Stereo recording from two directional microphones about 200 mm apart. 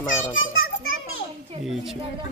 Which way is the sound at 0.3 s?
75° left (ahead or behind).